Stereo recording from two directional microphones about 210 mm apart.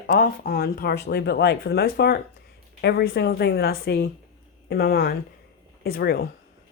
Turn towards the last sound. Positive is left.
turn(degrees=45)  # may be behind; listen again after turning